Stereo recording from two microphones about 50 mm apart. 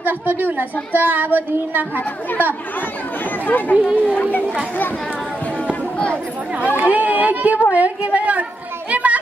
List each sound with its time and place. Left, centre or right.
0.0 s speech: right
2.0 s a woman's voice: left
3.7 s speech: right
4.0 s speech: left
5.7 s a sound: left
6.8 s a child's voice: right